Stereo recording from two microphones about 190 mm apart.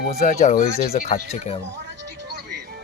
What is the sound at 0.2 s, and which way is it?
Speech, 35° left (ahead or behind).